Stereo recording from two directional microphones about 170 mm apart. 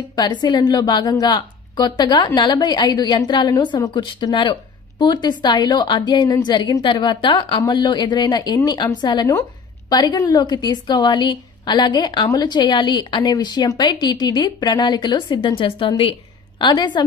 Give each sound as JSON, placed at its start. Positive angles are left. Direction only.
{"t": 0.1, "sound": "a woman's voice", "side_deg": 25}